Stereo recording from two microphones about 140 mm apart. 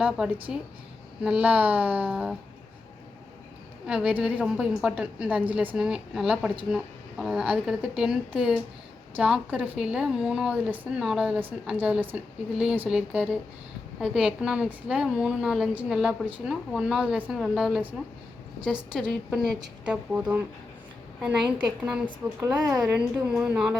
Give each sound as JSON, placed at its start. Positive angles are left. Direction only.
{"t": 0.0, "sound": "a woman's voice", "side_deg": -10}
{"t": 3.8, "sound": "a woman's voice", "side_deg": -5}
{"t": 18.9, "sound": "a woman's voice", "side_deg": 0}
{"t": 19.4, "sound": "a woman's voice", "side_deg": -30}
{"t": 19.8, "sound": "a woman's voice", "side_deg": -10}
{"t": 22.4, "sound": "a woman's voice", "side_deg": -20}
{"t": 23.3, "sound": "a woman's voice", "side_deg": -5}